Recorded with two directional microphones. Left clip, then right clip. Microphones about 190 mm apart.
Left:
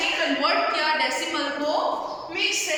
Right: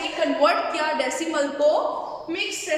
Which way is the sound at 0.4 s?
60° right (ahead or behind).